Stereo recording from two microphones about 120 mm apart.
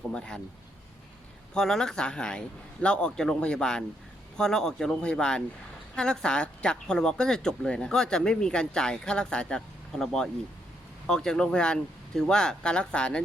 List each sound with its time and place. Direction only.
0.1 s speech: 5° left (ahead or behind)
1.5 s speech: 5° left (ahead or behind)